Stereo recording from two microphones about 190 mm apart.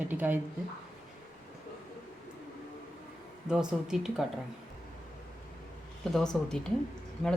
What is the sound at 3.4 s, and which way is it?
Speech, 5° right (ahead or behind).